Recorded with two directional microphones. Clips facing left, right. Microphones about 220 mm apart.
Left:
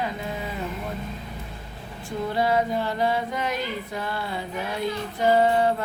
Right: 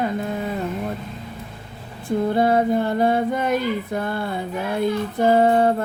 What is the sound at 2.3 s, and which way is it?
Female singing, 50° right (ahead or behind).